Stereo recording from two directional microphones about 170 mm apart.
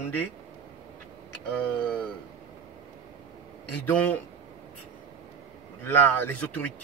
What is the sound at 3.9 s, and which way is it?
Speech, 10° left (ahead or behind).